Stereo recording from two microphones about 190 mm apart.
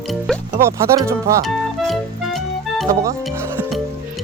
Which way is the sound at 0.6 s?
15° right (ahead or behind).